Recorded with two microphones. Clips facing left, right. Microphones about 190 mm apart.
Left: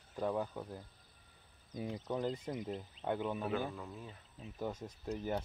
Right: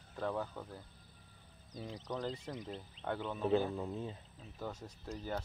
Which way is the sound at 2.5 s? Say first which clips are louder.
Left 4 dB; 5° left (ahead or behind).